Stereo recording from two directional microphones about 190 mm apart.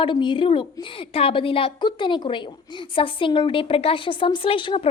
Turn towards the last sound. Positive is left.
turn(degrees=25)  # may be behind; listen again after turning